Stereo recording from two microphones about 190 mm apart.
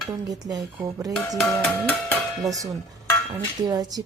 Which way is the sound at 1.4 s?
10° left (ahead or behind).